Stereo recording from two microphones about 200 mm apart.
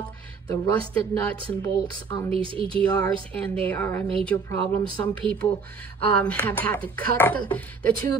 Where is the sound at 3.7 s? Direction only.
10° left (ahead or behind).